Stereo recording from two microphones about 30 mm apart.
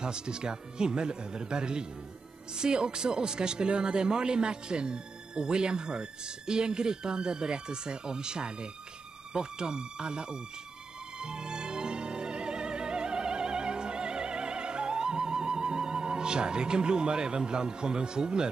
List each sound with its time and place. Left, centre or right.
0.0 s speech: right
11.1 s music: right